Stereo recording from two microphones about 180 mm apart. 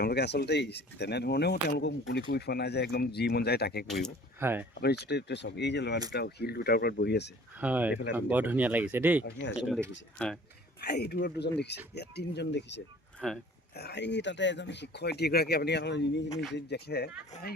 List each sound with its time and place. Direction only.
0.0 s speech: 65° left (ahead or behind)
1.6 s speech: 80° left; by 3.8 s 65° left (ahead or behind)
3.8 s speech: centre (ahead or behind)
4.4 s speech: 10° right (ahead or behind)
4.7 s speech: 65° left (ahead or behind)
6.1 s speech: 60° left (ahead or behind)
7.6 s speech: 10° right (ahead or behind)
10.8 s speech: 65° left (ahead or behind)
13.1 s speech: centre (ahead or behind)
13.7 s speech: 70° left (ahead or behind)